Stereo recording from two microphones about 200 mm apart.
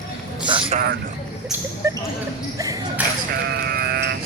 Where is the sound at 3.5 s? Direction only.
50° right (ahead or behind).